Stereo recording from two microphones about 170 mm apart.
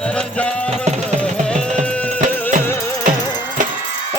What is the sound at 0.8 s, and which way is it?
Music, 40° right (ahead or behind).